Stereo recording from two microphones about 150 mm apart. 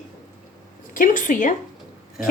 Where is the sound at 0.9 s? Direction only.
60° left (ahead or behind).